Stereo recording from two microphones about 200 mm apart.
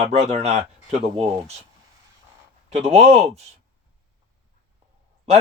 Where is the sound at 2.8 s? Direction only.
30° right (ahead or behind).